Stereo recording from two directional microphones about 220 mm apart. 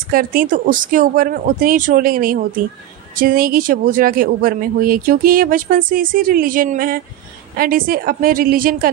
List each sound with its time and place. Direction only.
0.1 s speech: 40° right (ahead or behind)